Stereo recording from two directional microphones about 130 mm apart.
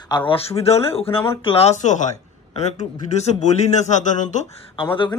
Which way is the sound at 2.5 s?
60° left (ahead or behind).